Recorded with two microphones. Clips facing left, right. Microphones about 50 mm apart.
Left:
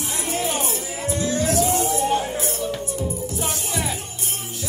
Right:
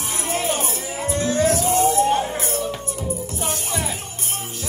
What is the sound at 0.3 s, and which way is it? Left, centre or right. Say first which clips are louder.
Music: right 2 dB; right.